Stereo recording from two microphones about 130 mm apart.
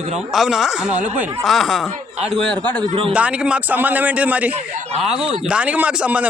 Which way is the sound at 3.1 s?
10° right (ahead or behind).